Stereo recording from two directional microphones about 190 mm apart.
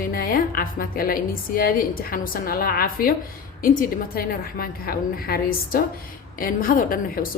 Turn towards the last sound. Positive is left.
turn(degrees=50)  # may be behind; listen again after turning